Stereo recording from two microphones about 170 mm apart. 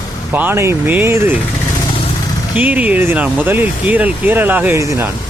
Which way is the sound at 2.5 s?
10° right (ahead or behind).